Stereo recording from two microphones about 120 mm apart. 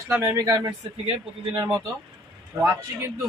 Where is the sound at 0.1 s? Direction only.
20° right (ahead or behind).